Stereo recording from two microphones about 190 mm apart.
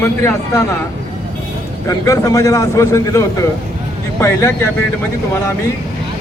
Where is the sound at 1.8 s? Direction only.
15° left (ahead or behind).